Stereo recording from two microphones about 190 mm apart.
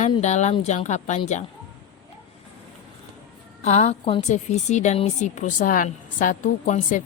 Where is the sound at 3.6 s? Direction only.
35° left (ahead or behind).